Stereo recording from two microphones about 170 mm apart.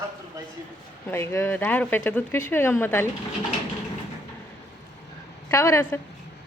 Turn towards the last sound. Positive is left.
turn(degrees=15)  # may be behind; listen again after turning